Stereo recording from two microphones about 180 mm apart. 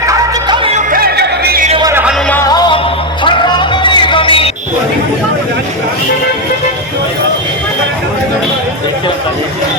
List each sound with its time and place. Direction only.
0.1 s music: 20° right (ahead or behind)
0.9 s music: 60° right (ahead or behind)
1.8 s music: 15° right (ahead or behind)
2.3 s music: 20° left (ahead or behind)